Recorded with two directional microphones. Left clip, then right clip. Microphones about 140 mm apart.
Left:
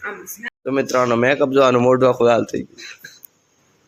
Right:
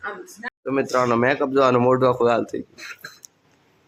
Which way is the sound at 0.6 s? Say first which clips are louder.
Left 3 dB; 20° left (ahead or behind).